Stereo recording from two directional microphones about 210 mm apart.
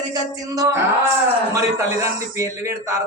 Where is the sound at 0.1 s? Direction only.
15° right (ahead or behind).